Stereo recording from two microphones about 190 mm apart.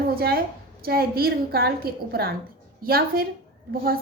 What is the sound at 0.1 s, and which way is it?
A woman's voice, 55° right (ahead or behind).